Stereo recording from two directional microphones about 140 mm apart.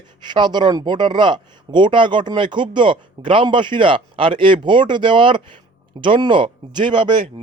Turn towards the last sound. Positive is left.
turn(degrees=-35)  # may be behind; listen again after turning